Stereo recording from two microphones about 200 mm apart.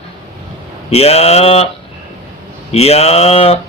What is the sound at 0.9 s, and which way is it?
Speech, 30° left (ahead or behind).